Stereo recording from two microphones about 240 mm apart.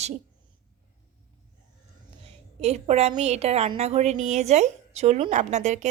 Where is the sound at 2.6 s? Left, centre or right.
Right.